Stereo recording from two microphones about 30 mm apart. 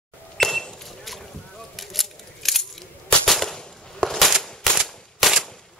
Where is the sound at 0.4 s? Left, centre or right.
Centre.